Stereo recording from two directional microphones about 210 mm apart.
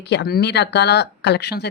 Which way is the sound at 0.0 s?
55° left (ahead or behind).